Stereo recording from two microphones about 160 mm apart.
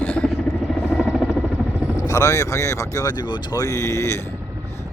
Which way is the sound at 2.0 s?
20° left (ahead or behind).